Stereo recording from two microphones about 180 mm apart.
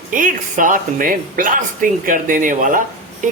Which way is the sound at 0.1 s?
45° right (ahead or behind).